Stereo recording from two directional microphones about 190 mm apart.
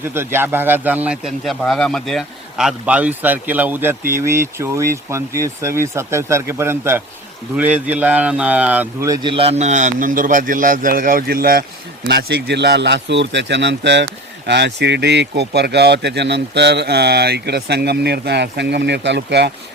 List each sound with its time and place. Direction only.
0.1 s speech: 10° right (ahead or behind); by 19.5 s 65° right (ahead or behind)